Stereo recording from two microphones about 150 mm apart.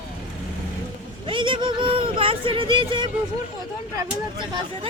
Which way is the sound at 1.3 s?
35° right (ahead or behind).